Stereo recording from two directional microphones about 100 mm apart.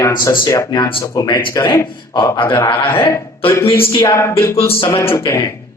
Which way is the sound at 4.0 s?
30° left (ahead or behind).